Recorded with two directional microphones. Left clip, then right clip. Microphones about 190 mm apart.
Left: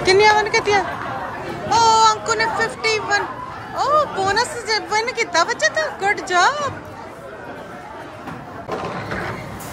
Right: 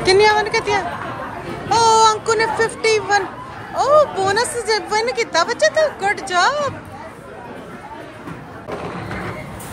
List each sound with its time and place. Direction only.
0.0 s speech: 15° left (ahead or behind)
1.7 s speech: 10° left (ahead or behind)